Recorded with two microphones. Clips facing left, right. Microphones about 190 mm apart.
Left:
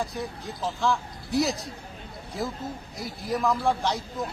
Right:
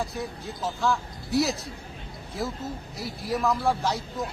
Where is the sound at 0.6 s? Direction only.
Centre (ahead or behind).